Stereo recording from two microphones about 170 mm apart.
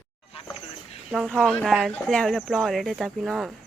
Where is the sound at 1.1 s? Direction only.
Centre (ahead or behind).